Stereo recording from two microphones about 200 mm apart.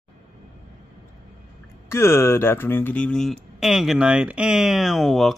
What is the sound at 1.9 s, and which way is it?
A man's voice, 15° left (ahead or behind).